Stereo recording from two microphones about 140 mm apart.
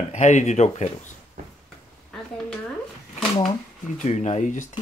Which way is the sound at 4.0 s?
55° left (ahead or behind).